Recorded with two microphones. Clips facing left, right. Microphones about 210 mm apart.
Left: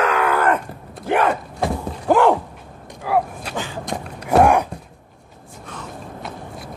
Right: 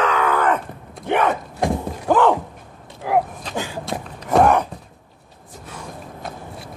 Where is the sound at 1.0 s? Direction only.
5° left (ahead or behind).